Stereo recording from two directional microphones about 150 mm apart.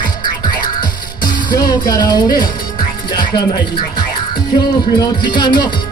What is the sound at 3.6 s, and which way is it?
Speech, 30° left (ahead or behind).